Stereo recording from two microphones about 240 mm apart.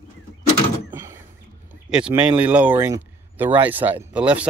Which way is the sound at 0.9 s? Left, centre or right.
Centre.